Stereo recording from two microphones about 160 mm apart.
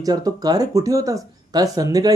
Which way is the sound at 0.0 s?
25° right (ahead or behind).